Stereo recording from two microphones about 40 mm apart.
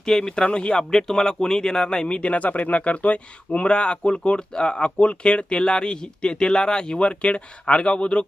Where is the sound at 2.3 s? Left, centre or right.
Left.